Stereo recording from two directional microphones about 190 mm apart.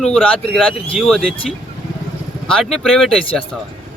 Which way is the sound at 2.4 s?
Centre (ahead or behind).